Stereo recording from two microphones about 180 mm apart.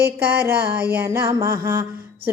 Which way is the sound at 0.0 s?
60° right (ahead or behind).